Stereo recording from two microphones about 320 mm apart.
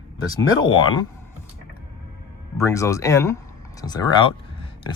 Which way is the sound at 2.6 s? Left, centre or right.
Centre.